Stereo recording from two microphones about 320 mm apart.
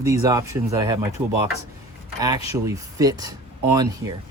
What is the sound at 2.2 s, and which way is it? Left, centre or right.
Speech, centre.